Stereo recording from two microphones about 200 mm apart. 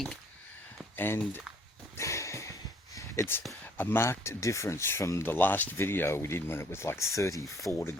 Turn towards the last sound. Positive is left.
turn(degrees=0)  # may be behind; listen again after turning